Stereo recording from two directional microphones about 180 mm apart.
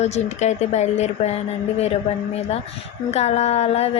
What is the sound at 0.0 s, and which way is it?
Speech, 40° left (ahead or behind).